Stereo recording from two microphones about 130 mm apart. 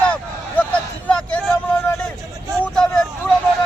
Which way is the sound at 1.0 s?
10° left (ahead or behind).